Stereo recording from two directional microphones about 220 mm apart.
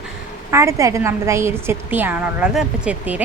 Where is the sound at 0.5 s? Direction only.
15° right (ahead or behind).